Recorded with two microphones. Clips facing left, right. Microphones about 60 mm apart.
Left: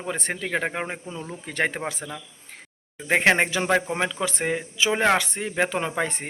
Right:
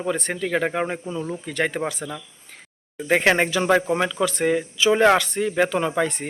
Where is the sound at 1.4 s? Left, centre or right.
Left.